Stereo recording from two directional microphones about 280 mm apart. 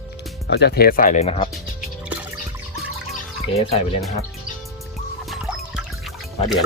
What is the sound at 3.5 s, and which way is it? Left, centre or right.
Speech, left.